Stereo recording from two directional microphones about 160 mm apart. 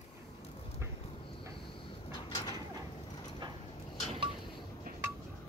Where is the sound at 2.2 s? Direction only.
30° left (ahead or behind).